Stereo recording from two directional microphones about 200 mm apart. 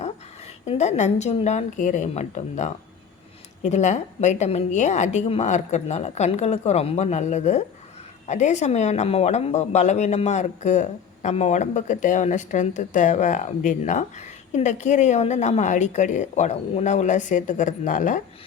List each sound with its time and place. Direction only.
0.6 s a woman's voice: 35° left (ahead or behind)